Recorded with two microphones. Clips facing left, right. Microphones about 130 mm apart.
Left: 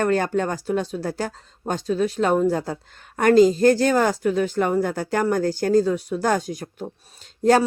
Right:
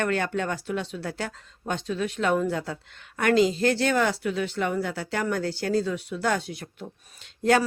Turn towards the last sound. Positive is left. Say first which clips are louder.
# left 5 dB
turn(degrees=40)  # may be behind; listen again after turning